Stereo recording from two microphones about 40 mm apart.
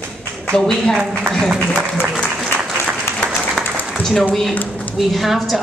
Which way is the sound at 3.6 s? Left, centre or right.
Centre.